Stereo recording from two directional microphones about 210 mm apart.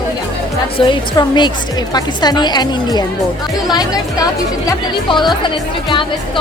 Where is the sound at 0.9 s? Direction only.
20° left (ahead or behind).